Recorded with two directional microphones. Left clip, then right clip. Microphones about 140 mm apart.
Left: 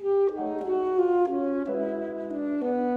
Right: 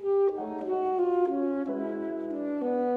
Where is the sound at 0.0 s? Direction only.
10° left (ahead or behind).